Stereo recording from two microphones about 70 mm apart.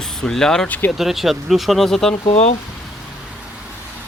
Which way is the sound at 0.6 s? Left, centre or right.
Left.